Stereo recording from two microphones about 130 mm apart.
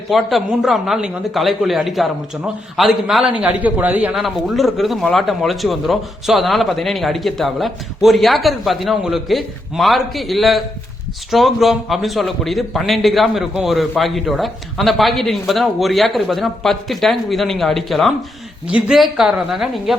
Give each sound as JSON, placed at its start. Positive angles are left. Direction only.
{"t": 0.1, "sound": "a man's voice", "side_deg": 0}
{"t": 4.2, "sound": "a man's voice", "side_deg": 0}